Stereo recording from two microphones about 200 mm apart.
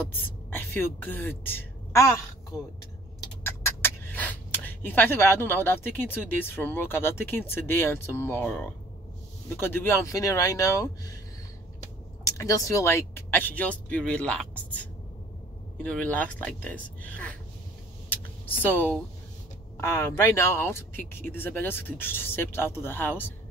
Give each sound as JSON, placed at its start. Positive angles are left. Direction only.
{"t": 0.5, "sound": "a woman's voice", "side_deg": 10}
{"t": 3.4, "sound": "speech", "side_deg": 10}
{"t": 12.3, "sound": "speech", "side_deg": 15}
{"t": 18.7, "sound": "speech", "side_deg": 10}